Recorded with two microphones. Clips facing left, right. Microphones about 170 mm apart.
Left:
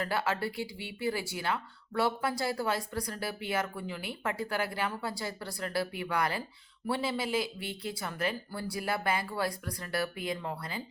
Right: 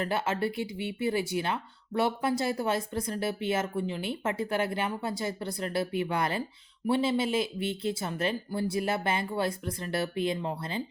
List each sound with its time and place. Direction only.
0.0 s speech: 20° right (ahead or behind)